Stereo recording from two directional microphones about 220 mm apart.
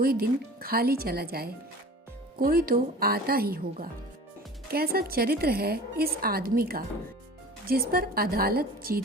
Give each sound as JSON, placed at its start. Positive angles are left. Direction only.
{"t": 0.0, "sound": "a woman's voice", "side_deg": -40}